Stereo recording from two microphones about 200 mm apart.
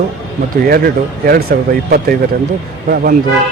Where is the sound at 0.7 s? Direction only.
50° right (ahead or behind).